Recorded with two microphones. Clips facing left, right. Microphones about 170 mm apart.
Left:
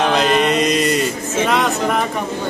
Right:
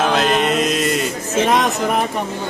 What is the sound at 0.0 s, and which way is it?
Mantra, centre (ahead or behind).